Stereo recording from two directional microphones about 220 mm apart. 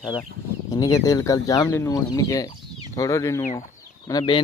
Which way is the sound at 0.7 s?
15° left (ahead or behind).